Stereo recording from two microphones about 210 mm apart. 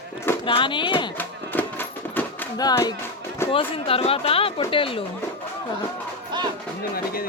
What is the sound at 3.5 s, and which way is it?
Speech, 25° left (ahead or behind).